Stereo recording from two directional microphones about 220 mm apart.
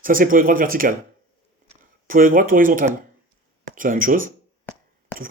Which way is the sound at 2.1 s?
40° right (ahead or behind).